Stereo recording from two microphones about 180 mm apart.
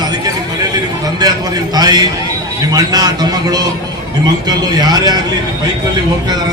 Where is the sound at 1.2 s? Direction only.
20° right (ahead or behind).